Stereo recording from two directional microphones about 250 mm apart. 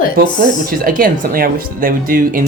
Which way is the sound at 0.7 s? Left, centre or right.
Right.